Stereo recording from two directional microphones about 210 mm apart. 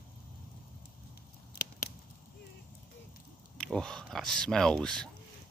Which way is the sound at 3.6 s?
5° left (ahead or behind).